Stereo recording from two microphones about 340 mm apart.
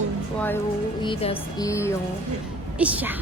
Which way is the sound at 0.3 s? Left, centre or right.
Centre.